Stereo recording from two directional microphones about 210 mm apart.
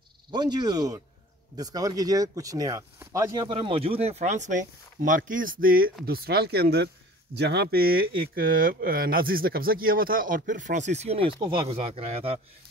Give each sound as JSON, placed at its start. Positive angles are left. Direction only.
{"t": 0.3, "sound": "speech", "side_deg": -20}